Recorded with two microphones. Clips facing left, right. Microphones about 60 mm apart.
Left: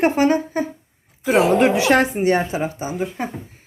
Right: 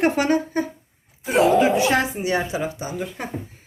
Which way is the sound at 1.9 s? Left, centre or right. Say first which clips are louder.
Left 5 dB; left.